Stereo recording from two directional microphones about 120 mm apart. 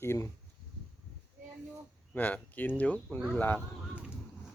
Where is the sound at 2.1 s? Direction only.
15° left (ahead or behind).